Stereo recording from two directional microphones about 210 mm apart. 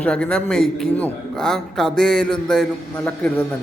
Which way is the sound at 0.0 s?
5° left (ahead or behind).